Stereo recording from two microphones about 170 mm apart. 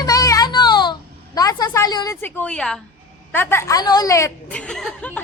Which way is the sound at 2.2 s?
5° left (ahead or behind).